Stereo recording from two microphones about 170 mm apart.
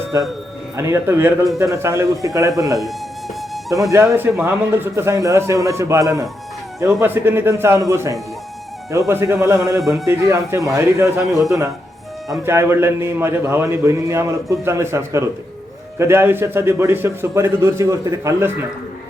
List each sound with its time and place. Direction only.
0.1 s a man's voice: 15° right (ahead or behind)
3.7 s a man's voice: 20° right (ahead or behind)
9.8 s a man's voice: centre (ahead or behind)
10.1 s a man's voice: 15° right (ahead or behind)